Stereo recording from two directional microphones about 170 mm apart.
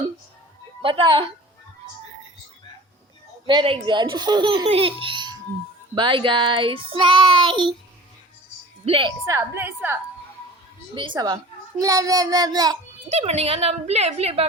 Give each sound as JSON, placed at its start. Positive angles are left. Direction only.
{"t": 0.8, "sound": "speech", "side_deg": -30}
{"t": 3.4, "sound": "speech", "side_deg": -30}
{"t": 8.8, "sound": "a woman's voice", "side_deg": -30}
{"t": 9.2, "sound": "a woman's voice", "side_deg": -15}
{"t": 10.9, "sound": "speech", "side_deg": -30}
{"t": 13.1, "sound": "a woman's voice", "side_deg": -40}